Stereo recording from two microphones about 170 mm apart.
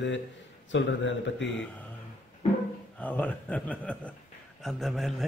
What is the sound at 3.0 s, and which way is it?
A man's voice, 10° left (ahead or behind).